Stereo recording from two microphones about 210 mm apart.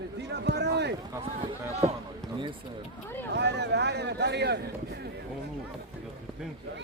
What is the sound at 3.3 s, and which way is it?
Speech, 55° right (ahead or behind).